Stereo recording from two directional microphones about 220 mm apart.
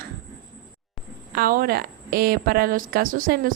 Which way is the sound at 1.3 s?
40° right (ahead or behind).